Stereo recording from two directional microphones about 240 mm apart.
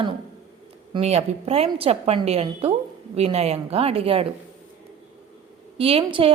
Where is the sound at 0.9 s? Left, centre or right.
Right.